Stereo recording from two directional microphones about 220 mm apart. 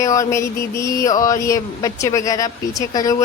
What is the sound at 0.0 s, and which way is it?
Speech, 15° left (ahead or behind).